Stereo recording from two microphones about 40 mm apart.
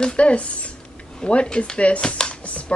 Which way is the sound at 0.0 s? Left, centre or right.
Left.